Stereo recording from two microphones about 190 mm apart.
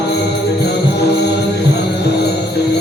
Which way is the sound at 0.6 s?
60° left (ahead or behind).